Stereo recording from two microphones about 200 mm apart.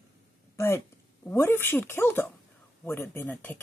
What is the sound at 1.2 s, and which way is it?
Speech, 10° left (ahead or behind).